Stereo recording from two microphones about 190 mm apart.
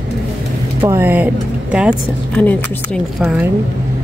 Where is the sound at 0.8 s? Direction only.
10° right (ahead or behind).